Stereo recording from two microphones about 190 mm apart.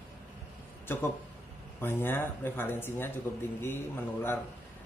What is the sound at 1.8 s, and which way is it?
Speech, 10° left (ahead or behind).